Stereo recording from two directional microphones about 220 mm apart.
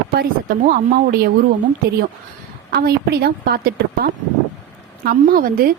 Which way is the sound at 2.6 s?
45° right (ahead or behind).